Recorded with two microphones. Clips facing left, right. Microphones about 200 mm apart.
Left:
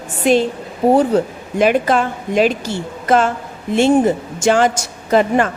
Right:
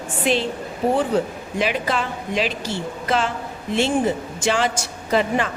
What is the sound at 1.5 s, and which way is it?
A woman's voice, 50° left (ahead or behind).